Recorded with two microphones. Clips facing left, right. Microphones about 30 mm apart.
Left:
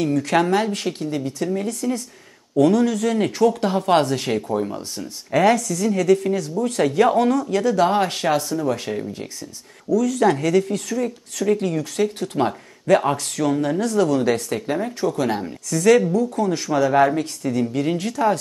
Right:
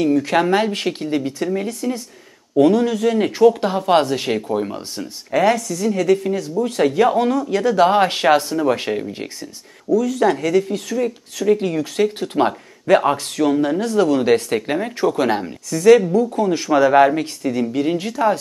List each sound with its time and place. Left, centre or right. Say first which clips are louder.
0.0 s speech: right 3 dB; centre
3.3 s speech: right 6 dB; right
3.6 s speech: right 2 dB; centre
5.3 s speech: even; centre; by 9.9 s right
9.9 s speech: right 1 dB; centre
15.7 s speech: right 4 dB; centre
16.0 s speech: right 3 dB; right